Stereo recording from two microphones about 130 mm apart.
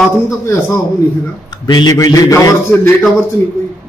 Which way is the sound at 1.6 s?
30° left (ahead or behind).